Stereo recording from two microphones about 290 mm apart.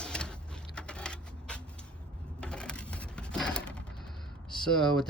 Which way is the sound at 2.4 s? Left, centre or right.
Centre.